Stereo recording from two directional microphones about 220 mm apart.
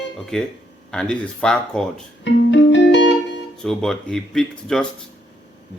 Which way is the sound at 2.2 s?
55° left (ahead or behind).